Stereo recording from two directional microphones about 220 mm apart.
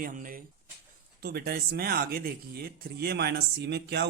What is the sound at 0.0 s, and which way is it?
Speech, 40° right (ahead or behind).